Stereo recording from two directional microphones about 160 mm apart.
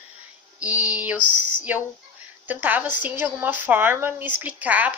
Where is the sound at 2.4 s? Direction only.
10° right (ahead or behind).